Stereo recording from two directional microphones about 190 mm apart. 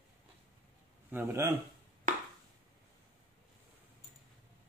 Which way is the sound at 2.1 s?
45° right (ahead or behind).